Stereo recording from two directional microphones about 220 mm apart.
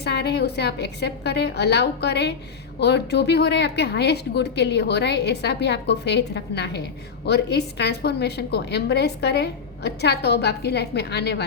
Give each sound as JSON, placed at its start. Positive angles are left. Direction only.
{"t": 0.0, "sound": "a woman's voice", "side_deg": 50}